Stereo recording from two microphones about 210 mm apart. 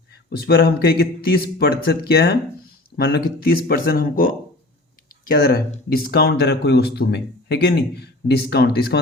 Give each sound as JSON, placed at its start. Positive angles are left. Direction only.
{"t": 0.1, "sound": "speech", "side_deg": 50}
{"t": 5.3, "sound": "speech", "side_deg": 45}